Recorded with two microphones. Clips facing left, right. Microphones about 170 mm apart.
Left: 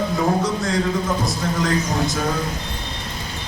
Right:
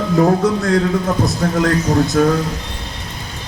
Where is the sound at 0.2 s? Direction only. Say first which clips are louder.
Right 9 dB; 55° right (ahead or behind).